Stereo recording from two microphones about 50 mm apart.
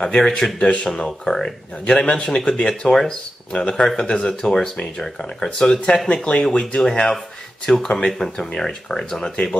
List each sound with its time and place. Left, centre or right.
0.0 s speech: centre
6.2 s speech: left